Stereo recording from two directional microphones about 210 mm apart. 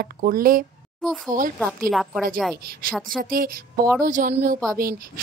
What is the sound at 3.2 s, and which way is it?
A woman's voice, 45° right (ahead or behind).